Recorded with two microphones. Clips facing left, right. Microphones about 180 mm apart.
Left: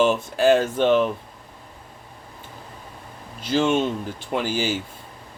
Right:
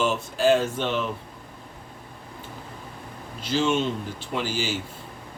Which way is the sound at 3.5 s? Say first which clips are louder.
Left 3 dB; 50° left (ahead or behind).